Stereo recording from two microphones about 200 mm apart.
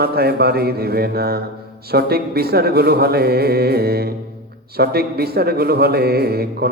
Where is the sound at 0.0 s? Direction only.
50° right (ahead or behind).